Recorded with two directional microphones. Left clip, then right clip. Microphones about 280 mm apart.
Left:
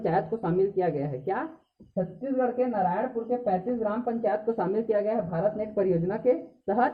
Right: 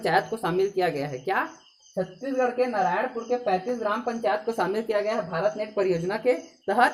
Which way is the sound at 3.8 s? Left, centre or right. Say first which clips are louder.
Right 1 dB; centre.